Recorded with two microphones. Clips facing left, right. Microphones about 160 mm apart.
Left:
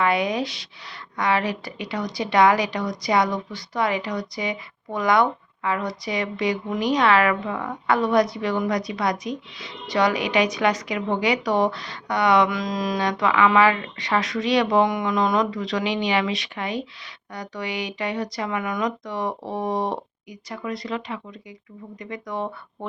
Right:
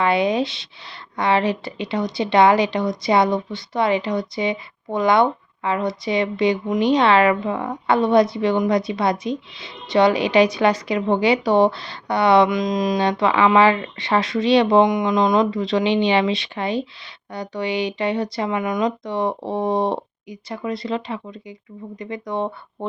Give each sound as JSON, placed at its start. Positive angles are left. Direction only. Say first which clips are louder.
{"t": 0.0, "sound": "a woman's voice", "louder": "right 4 dB", "side_deg": -25}
{"t": 12.5, "sound": "a woman's voice", "louder": "right 5 dB", "side_deg": -20}